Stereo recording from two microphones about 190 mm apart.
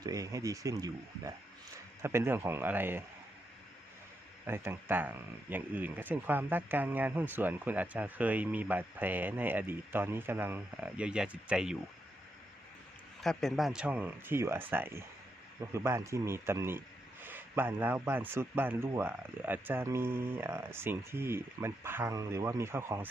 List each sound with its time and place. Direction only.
0.0 s speech: 20° right (ahead or behind)
4.4 s speech: 10° right (ahead or behind)
13.2 s speech: centre (ahead or behind)